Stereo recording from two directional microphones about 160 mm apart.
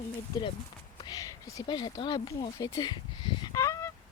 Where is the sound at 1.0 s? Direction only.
25° left (ahead or behind).